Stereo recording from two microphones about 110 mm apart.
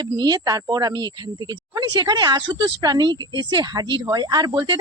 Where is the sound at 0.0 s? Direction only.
40° right (ahead or behind).